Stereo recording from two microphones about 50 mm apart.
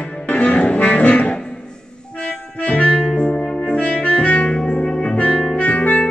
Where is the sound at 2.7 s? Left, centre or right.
Left.